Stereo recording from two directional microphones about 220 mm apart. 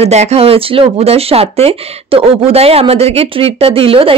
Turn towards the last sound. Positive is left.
turn(degrees=-25)  # may be behind; listen again after turning